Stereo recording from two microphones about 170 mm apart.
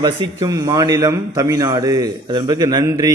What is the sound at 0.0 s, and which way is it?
A man's voice, 20° right (ahead or behind).